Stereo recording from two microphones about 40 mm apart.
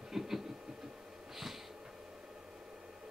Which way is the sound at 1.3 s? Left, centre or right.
Centre.